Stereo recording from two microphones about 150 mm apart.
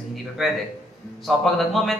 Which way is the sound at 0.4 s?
Centre (ahead or behind).